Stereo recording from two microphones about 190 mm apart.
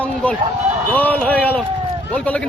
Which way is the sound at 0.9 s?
10° left (ahead or behind).